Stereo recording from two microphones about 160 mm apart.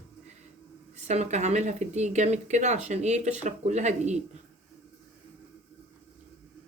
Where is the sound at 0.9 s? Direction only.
45° right (ahead or behind).